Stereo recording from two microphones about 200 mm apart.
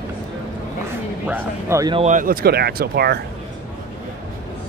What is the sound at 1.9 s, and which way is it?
Speech, 35° right (ahead or behind).